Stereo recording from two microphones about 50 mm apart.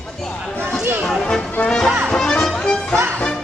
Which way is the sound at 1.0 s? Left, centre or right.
Centre.